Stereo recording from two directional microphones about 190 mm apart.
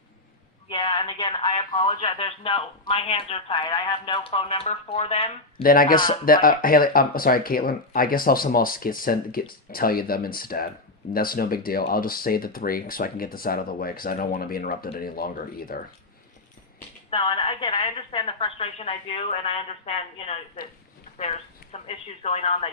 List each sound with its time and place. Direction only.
0.7 s speech: 25° left (ahead or behind)
5.6 s speech: 50° left (ahead or behind)
17.1 s speech: 25° left (ahead or behind)